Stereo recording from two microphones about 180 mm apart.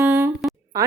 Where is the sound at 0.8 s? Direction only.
20° right (ahead or behind).